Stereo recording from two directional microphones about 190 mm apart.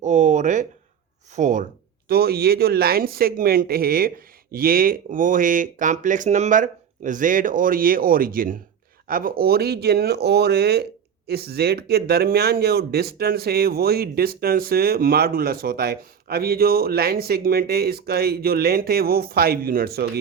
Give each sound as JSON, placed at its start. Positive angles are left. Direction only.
{"t": 0.0, "sound": "a sound", "side_deg": -40}
{"t": 1.4, "sound": "speech", "side_deg": -40}
{"t": 2.0, "sound": "speech", "side_deg": -55}